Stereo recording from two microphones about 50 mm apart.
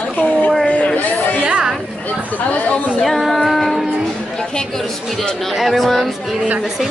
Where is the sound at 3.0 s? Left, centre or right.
Centre.